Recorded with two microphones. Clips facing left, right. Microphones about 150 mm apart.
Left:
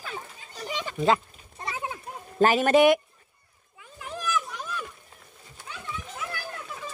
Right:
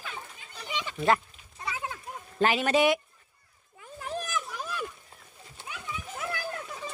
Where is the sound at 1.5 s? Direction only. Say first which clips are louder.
Left 2 dB; 30° left (ahead or behind).